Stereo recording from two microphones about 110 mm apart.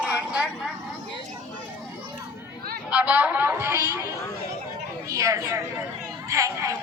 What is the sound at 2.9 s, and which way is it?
A woman's voice, 10° right (ahead or behind).